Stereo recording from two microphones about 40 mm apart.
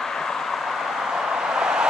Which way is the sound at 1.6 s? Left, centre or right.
Centre.